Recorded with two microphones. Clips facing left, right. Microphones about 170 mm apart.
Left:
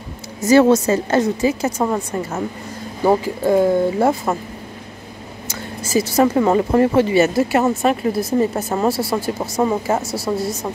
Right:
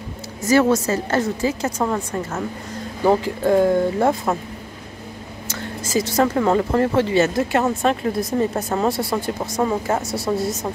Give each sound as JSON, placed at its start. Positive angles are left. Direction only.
{"t": 0.5, "sound": "a woman's voice", "side_deg": 25}
{"t": 5.5, "sound": "speech", "side_deg": 10}